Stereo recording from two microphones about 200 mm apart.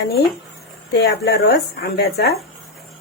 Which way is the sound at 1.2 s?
55° left (ahead or behind).